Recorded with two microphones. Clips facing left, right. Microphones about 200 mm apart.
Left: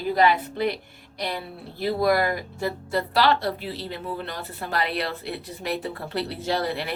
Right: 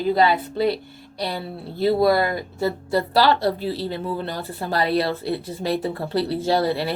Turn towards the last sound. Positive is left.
turn(degrees=-30)  # may be behind; listen again after turning